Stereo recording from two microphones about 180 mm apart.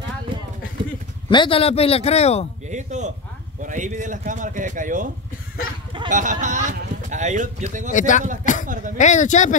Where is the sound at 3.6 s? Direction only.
45° right (ahead or behind).